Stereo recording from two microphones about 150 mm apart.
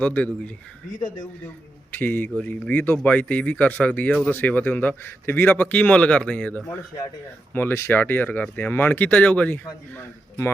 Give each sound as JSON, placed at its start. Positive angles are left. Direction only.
{"t": 0.0, "sound": "speech", "side_deg": 10}
{"t": 1.9, "sound": "speech", "side_deg": 10}